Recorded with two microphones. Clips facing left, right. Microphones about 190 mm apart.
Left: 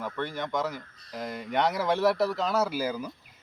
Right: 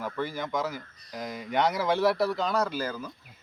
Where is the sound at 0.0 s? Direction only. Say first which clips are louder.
Right 1 dB; centre (ahead or behind).